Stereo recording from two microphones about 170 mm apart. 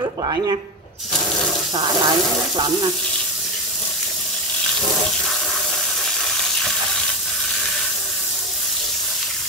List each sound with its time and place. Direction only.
0.2 s speech: 25° right (ahead or behind)
1.8 s speech: 30° right (ahead or behind)